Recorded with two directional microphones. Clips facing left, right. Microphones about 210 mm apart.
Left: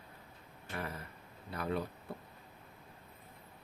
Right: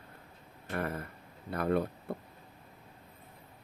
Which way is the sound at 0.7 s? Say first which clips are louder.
Right 7 dB; 55° right (ahead or behind).